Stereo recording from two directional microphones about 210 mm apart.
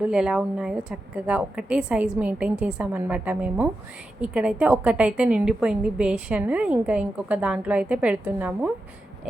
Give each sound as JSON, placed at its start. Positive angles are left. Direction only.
{"t": 0.0, "sound": "a woman's voice", "side_deg": -5}